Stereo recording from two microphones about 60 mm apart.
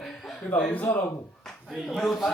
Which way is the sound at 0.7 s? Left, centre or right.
Left.